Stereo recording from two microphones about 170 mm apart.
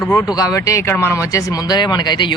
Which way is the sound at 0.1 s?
20° left (ahead or behind).